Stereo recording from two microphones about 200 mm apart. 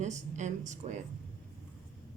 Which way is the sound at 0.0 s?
35° right (ahead or behind).